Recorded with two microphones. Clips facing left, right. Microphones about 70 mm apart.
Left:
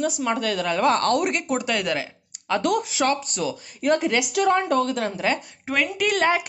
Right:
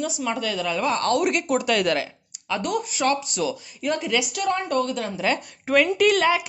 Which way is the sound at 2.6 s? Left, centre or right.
Left.